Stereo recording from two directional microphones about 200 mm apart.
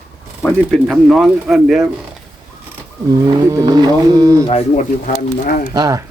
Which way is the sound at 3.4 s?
20° right (ahead or behind).